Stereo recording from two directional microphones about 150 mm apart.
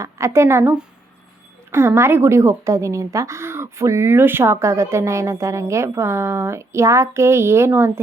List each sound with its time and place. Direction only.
0.0 s a woman's voice: 20° right (ahead or behind)